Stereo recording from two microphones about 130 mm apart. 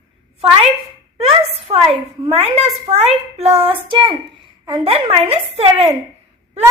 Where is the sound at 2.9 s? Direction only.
55° right (ahead or behind).